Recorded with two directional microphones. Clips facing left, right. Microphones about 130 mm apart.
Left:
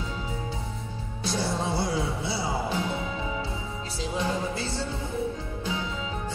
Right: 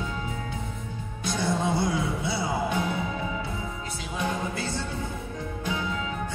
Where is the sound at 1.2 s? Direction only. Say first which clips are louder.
Right 2 dB; 30° left (ahead or behind).